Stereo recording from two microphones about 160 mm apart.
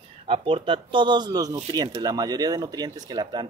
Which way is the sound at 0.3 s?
35° right (ahead or behind).